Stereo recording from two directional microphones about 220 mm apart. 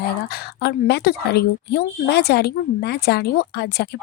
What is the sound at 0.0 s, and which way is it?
Speech, 45° left (ahead or behind).